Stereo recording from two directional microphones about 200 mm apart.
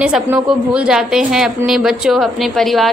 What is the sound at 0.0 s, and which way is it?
Music, 5° right (ahead or behind).